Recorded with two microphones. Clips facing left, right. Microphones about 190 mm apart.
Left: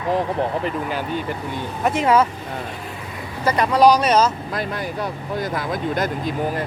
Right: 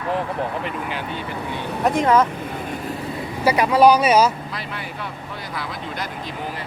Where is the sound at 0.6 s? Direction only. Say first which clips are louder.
Left 3 dB; 40° left (ahead or behind).